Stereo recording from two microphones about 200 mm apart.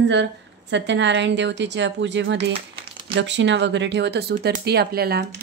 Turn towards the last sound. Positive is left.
turn(degrees=-50)  # may be behind; listen again after turning